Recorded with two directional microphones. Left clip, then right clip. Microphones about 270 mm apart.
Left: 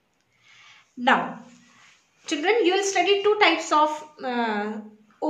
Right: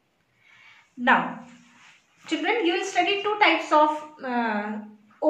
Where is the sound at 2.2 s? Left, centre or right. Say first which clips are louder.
Left 3 dB; left.